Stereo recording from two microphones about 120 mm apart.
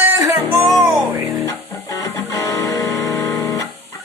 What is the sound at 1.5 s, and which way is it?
Music, 20° left (ahead or behind).